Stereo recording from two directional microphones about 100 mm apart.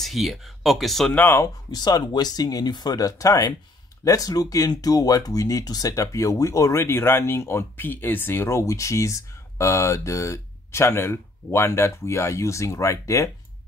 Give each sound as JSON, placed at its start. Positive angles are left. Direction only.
{"t": 0.0, "sound": "speech", "side_deg": 0}
{"t": 1.1, "sound": "speech", "side_deg": 20}
{"t": 1.4, "sound": "speech", "side_deg": 40}